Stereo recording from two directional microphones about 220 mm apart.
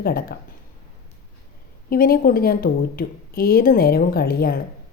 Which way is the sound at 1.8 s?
40° left (ahead or behind).